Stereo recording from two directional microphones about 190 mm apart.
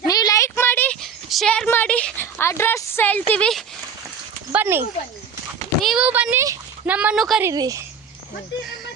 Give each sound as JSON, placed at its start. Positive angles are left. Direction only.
{"t": 0.1, "sound": "a sound", "side_deg": 20}
{"t": 4.5, "sound": "speech", "side_deg": -10}
{"t": 7.4, "sound": "speech", "side_deg": -20}